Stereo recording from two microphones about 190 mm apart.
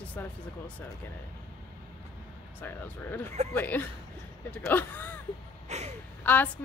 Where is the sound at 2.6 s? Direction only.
10° left (ahead or behind).